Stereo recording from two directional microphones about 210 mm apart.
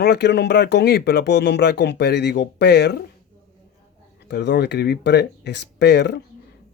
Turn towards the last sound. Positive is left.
turn(degrees=55)  # may be behind; listen again after turning